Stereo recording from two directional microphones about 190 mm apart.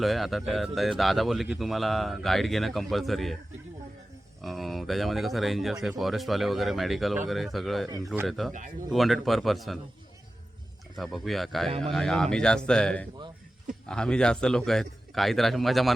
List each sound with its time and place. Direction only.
0.0 s speech: centre (ahead or behind)
4.4 s speech: centre (ahead or behind)
7.9 s speech: 15° right (ahead or behind)
8.3 s speech: centre (ahead or behind)
10.9 s speech: centre (ahead or behind)